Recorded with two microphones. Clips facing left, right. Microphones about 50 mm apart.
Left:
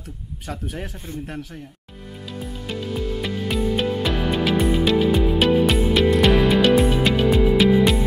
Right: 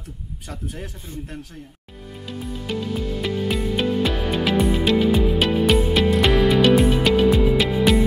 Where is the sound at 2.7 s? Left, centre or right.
Centre.